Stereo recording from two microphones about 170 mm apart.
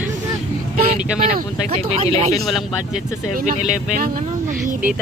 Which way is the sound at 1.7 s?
35° right (ahead or behind).